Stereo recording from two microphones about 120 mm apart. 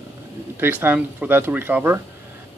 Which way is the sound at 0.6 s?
15° right (ahead or behind).